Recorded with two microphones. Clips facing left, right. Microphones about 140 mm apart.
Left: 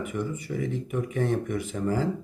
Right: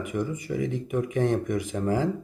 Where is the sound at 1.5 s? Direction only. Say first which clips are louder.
Right 2 dB; 45° right (ahead or behind).